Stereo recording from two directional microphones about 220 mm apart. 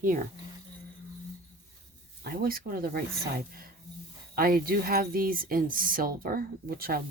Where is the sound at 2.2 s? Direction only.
40° right (ahead or behind).